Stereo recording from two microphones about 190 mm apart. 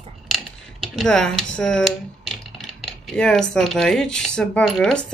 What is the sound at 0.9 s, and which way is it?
Speech, 5° left (ahead or behind).